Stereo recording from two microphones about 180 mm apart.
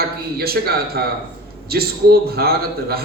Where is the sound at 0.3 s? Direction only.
60° right (ahead or behind).